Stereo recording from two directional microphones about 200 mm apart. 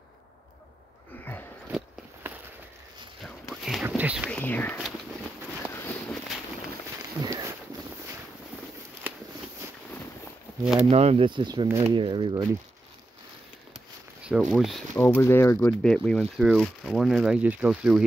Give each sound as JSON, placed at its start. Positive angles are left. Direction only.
{"t": 3.6, "sound": "a sound", "side_deg": -5}
{"t": 4.3, "sound": "speech", "side_deg": 10}
{"t": 7.0, "sound": "a sound", "side_deg": -20}
{"t": 10.6, "sound": "speech", "side_deg": -5}
{"t": 10.9, "sound": "speech", "side_deg": -30}
{"t": 14.2, "sound": "speech", "side_deg": -5}
{"t": 15.0, "sound": "speech", "side_deg": 10}